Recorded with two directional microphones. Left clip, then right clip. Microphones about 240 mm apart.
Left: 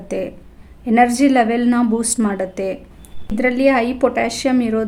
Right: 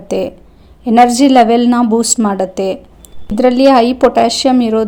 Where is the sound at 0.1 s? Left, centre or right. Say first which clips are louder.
Right 7 dB; centre.